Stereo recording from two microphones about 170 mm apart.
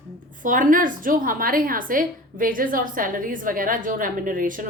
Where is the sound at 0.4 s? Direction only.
50° right (ahead or behind).